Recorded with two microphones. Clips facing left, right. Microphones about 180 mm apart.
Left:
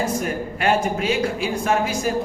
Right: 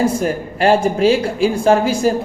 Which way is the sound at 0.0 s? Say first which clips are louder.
Right 6 dB; 30° right (ahead or behind).